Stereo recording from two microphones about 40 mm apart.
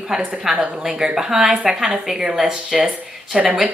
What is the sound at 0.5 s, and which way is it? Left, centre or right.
A woman's voice, centre.